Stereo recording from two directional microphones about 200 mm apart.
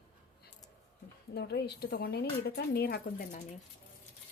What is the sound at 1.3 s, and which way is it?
Speech, 55° left (ahead or behind).